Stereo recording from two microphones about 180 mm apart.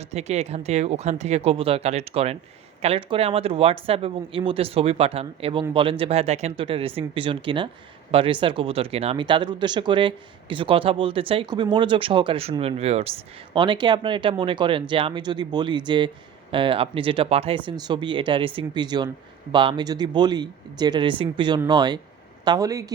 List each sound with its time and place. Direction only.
0.0 s speech: 35° right (ahead or behind); by 22.9 s 20° right (ahead or behind)